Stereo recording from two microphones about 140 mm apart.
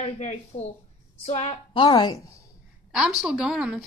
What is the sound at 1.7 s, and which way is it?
Speech, 35° left (ahead or behind).